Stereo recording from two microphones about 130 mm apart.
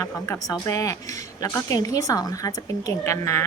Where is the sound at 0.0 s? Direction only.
25° left (ahead or behind).